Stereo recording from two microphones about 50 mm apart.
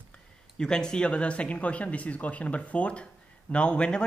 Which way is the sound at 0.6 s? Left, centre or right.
Centre.